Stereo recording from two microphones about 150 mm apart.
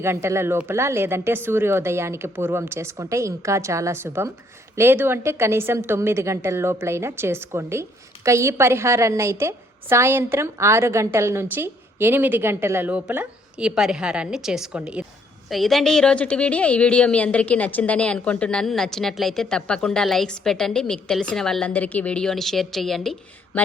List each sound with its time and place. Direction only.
0.0 s a woman's voice: 15° right (ahead or behind); by 23.1 s centre (ahead or behind)